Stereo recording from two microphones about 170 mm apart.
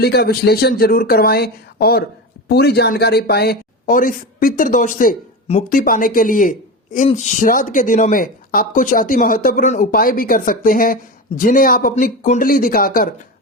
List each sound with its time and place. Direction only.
0.0 s speech: 70° left (ahead or behind)